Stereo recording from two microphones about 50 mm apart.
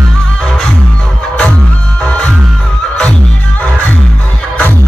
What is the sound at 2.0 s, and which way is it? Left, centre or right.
Music, left.